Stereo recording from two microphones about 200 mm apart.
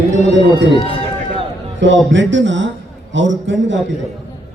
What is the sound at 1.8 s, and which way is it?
A man's voice, 65° right (ahead or behind).